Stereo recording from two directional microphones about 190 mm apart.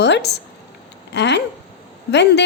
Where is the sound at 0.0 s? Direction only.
65° left (ahead or behind).